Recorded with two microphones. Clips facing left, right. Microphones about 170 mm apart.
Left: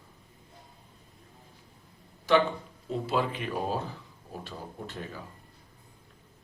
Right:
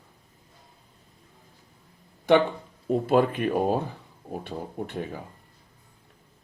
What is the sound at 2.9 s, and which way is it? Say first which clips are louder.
Speech: right 8 dB; 55° right (ahead or behind).